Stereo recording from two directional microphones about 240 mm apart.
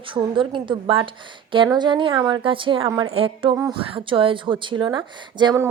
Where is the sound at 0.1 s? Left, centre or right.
Right.